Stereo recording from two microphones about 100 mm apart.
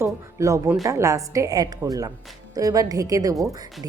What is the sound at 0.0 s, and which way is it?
Music, 30° right (ahead or behind).